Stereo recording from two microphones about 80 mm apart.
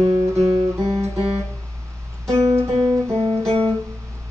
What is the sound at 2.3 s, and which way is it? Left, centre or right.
Music, right.